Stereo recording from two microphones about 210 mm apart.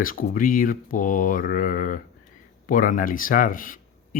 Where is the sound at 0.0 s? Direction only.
40° left (ahead or behind).